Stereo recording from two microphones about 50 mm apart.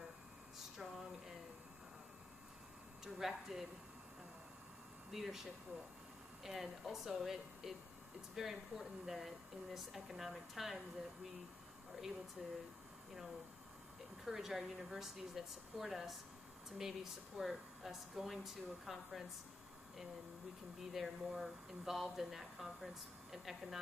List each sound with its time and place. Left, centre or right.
0.6 s a sound: centre
3.0 s speech: centre
5.1 s speech: centre
11.9 s speech: centre
14.2 s speech: centre
20.9 s speech: centre